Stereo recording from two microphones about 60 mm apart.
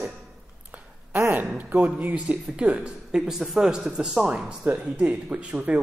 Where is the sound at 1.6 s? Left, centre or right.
Right.